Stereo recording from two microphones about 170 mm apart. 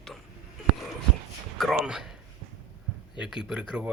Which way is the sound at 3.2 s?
5° right (ahead or behind).